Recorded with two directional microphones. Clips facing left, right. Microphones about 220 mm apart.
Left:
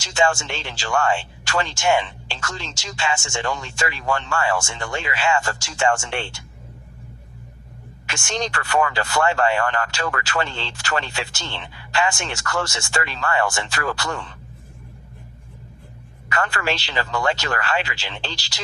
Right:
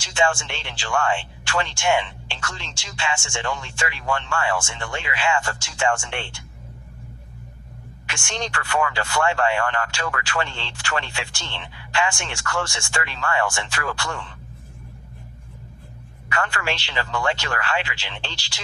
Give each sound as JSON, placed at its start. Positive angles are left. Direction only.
{"t": 0.0, "sound": "speech", "side_deg": 40}
{"t": 8.0, "sound": "speech", "side_deg": 40}
{"t": 16.3, "sound": "speech", "side_deg": 40}